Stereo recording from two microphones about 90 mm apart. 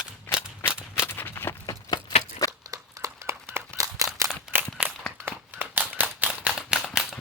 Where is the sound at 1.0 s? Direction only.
25° left (ahead or behind).